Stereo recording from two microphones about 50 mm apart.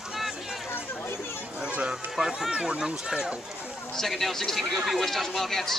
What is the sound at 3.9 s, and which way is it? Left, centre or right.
Speech, centre.